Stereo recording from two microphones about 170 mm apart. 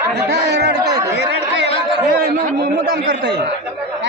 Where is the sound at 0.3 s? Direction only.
80° right.